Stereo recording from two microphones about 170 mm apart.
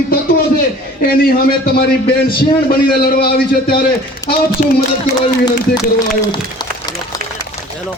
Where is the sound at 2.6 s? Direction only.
60° left (ahead or behind).